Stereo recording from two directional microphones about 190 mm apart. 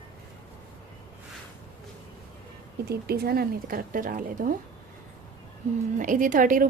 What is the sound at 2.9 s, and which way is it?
A woman's voice, 55° right (ahead or behind).